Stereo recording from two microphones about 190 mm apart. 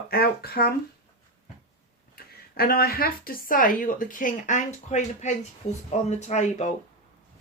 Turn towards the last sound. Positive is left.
turn(degrees=40)  # may be behind; listen again after turning